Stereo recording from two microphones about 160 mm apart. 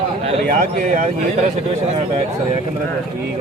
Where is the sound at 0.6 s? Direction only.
55° right (ahead or behind).